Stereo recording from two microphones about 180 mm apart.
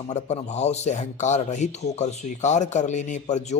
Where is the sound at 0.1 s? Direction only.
40° left (ahead or behind).